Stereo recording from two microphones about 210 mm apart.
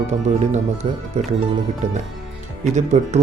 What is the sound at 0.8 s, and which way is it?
Speech, 25° right (ahead or behind).